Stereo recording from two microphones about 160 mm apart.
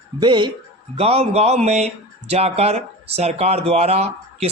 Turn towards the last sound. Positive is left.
turn(degrees=-40)  # may be behind; listen again after turning